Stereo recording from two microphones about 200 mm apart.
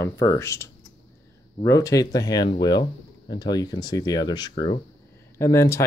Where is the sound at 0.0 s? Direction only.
15° left (ahead or behind).